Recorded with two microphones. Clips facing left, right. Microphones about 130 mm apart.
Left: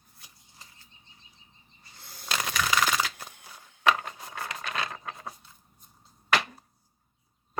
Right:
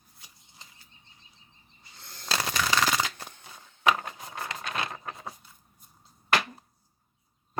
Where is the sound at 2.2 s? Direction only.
30° right (ahead or behind).